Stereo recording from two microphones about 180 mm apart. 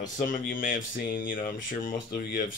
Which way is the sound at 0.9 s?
50° left (ahead or behind).